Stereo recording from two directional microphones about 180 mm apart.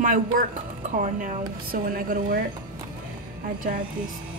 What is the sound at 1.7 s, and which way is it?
Speech, 55° right (ahead or behind).